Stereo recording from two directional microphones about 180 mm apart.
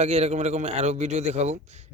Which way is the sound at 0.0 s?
35° right (ahead or behind).